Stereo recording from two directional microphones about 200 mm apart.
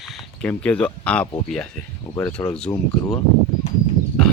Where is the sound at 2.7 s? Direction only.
15° left (ahead or behind).